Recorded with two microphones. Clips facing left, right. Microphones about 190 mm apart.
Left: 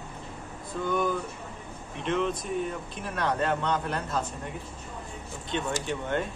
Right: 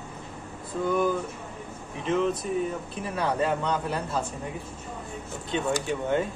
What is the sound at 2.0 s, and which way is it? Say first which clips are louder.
A man's voice: right 3 dB; 5° right (ahead or behind).